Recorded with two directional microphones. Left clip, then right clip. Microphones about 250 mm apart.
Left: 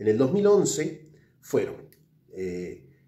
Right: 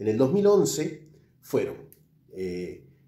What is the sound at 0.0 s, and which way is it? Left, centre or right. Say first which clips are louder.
A man's voice: even; centre.